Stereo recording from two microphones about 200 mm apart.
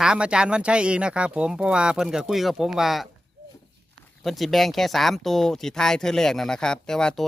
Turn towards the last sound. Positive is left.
turn(degrees=5)  # may be behind; listen again after turning